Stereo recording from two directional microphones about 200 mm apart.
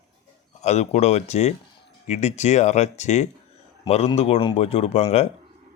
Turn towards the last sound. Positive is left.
turn(degrees=30)  # may be behind; listen again after turning